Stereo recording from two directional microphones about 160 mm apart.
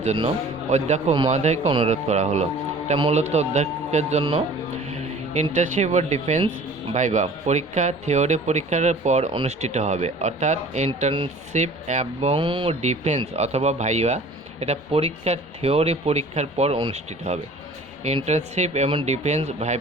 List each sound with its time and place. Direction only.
0.0 s a man's voice: 45° right (ahead or behind)
12.4 s speech: 30° right (ahead or behind)
12.8 s speech: 45° right (ahead or behind)